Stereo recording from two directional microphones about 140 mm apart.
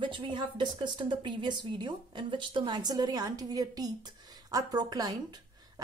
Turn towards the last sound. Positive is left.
turn(degrees=-25)  # may be behind; listen again after turning